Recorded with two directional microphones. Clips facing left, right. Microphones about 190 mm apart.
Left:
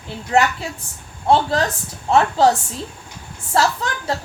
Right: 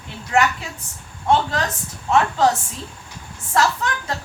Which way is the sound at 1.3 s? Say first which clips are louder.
Left 3 dB; 35° left (ahead or behind).